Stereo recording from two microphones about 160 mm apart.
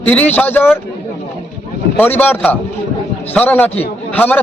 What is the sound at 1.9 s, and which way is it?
Speech, 10° left (ahead or behind).